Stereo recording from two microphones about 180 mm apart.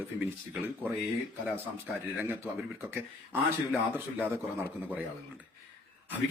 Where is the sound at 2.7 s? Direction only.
10° right (ahead or behind).